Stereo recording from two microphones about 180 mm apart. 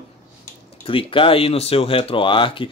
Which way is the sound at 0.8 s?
30° left (ahead or behind).